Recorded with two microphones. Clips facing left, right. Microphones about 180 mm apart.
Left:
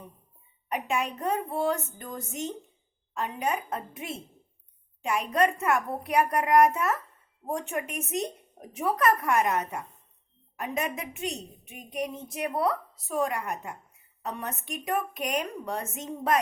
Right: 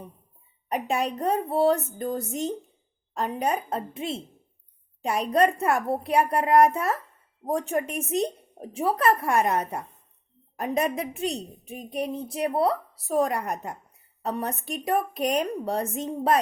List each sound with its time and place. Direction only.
0.7 s a woman's voice: 35° right (ahead or behind)